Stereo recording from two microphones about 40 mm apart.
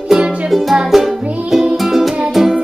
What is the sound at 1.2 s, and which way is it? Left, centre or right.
Music, right.